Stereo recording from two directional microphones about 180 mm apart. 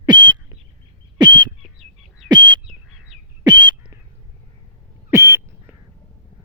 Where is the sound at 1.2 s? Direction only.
25° right (ahead or behind).